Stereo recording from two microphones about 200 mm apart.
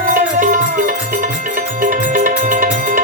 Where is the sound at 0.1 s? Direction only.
40° right (ahead or behind).